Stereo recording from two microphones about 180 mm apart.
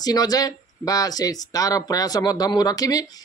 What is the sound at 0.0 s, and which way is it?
Speech, 20° left (ahead or behind).